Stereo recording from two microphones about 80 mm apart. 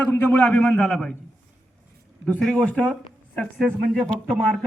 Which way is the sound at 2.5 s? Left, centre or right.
Centre.